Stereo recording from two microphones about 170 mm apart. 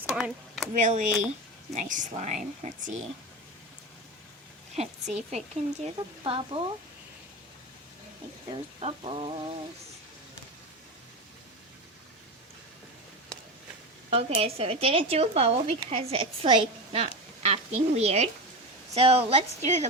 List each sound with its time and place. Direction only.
0.2 s speech: centre (ahead or behind)
0.7 s speech: 50° right (ahead or behind)
5.1 s speech: 40° right (ahead or behind)
8.4 s speech: 35° right (ahead or behind)
14.1 s speech: 35° right (ahead or behind)